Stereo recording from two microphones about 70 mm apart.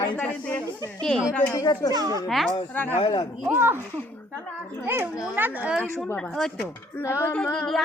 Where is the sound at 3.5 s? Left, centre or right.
Right.